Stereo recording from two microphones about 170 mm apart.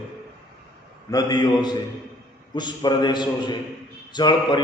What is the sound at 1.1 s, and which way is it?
A man's voice, 20° left (ahead or behind).